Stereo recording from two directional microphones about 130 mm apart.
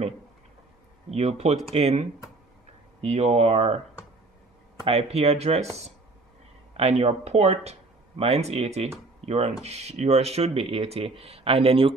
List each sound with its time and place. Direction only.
1.1 s speech: 55° right (ahead or behind)
4.8 s speech: 50° right (ahead or behind)
6.8 s speech: 55° right (ahead or behind)